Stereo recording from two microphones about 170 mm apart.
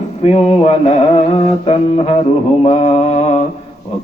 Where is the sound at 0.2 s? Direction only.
40° left (ahead or behind).